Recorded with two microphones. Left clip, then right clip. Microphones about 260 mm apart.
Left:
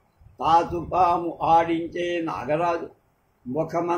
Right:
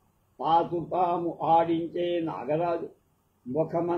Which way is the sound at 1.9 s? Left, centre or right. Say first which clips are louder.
Left 2 dB; centre.